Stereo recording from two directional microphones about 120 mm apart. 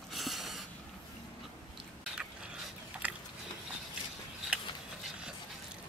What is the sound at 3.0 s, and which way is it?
Biting, 10° right (ahead or behind).